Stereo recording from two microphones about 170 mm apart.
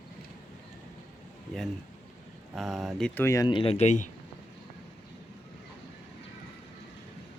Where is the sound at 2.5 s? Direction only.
Centre (ahead or behind); by 4.0 s 40° left (ahead or behind).